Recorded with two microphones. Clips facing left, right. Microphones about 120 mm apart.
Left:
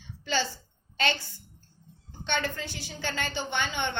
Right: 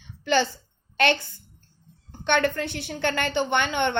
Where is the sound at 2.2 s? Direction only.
60° right (ahead or behind).